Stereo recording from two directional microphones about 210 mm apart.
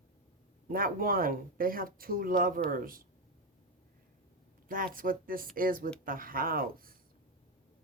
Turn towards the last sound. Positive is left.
turn(degrees=-45)  # may be behind; listen again after turning